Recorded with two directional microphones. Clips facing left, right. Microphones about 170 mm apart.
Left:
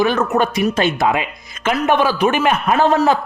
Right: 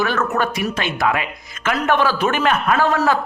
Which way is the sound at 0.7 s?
30° left (ahead or behind).